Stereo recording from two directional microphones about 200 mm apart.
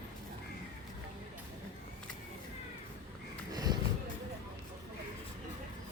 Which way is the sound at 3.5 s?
20° right (ahead or behind).